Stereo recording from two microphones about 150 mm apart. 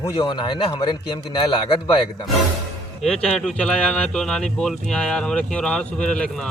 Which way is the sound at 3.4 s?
5° left (ahead or behind).